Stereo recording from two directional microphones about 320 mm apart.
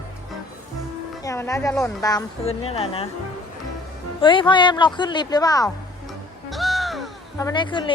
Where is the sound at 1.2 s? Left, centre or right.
Centre.